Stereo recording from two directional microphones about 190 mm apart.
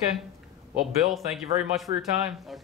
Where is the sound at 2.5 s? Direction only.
Centre (ahead or behind).